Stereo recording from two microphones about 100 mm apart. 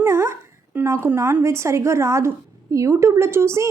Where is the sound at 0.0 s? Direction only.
30° right (ahead or behind).